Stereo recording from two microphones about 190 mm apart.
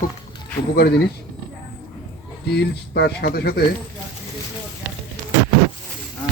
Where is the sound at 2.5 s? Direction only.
60° left (ahead or behind).